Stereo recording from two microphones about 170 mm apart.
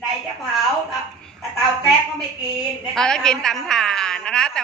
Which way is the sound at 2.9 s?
5° left (ahead or behind).